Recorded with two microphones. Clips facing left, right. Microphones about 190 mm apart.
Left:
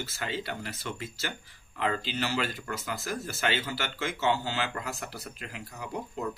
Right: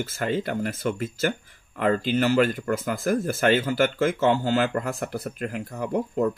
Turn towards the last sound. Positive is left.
turn(degrees=-50)  # may be behind; listen again after turning